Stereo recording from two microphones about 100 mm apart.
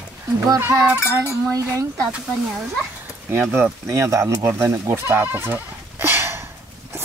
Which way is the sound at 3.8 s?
30° right (ahead or behind).